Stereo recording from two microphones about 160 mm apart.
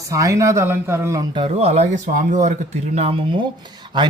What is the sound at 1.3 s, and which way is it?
Speech, 35° right (ahead or behind).